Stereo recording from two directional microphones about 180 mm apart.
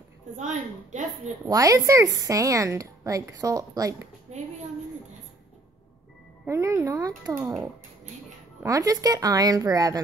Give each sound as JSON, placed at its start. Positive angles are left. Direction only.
{"t": 0.4, "sound": "a woman's voice", "side_deg": -40}
{"t": 1.5, "sound": "a woman's voice", "side_deg": -20}
{"t": 6.4, "sound": "a woman's voice", "side_deg": -15}
{"t": 8.6, "sound": "a woman's voice", "side_deg": -20}